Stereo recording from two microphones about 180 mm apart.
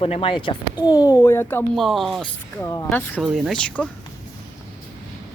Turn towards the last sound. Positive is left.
turn(degrees=5)  # may be behind; listen again after turning